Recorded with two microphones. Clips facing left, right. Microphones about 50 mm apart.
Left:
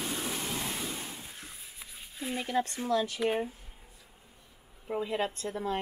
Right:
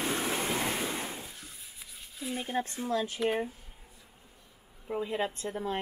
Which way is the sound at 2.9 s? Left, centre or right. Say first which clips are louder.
Left 2 dB; right.